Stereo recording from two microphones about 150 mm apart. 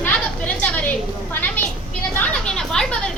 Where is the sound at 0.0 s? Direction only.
10° left (ahead or behind).